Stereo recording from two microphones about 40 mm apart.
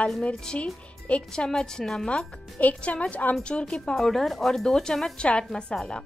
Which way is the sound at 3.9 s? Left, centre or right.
Centre.